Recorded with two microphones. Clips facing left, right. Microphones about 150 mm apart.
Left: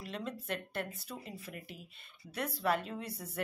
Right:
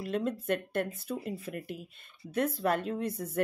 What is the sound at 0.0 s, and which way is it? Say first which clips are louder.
Speech: right 9 dB; 50° right (ahead or behind).